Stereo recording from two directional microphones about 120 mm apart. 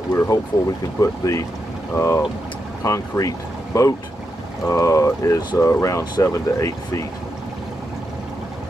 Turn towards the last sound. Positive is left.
turn(degrees=25)  # may be behind; listen again after turning